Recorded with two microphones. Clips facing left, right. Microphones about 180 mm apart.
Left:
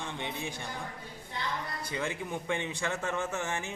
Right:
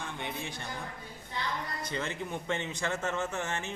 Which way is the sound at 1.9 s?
10° left (ahead or behind).